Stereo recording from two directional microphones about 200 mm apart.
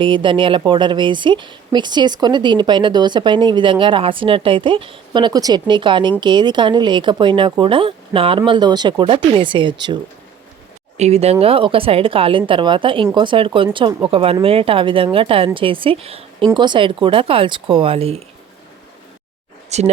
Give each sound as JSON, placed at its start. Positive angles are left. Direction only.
{"t": 0.0, "sound": "speech", "side_deg": -25}
{"t": 19.7, "sound": "speech", "side_deg": -35}